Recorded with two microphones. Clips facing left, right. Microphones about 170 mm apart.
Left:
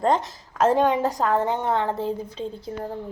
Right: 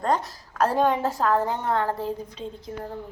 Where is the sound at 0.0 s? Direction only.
25° left (ahead or behind).